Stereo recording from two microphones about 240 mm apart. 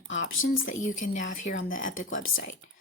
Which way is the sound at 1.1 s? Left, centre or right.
Left.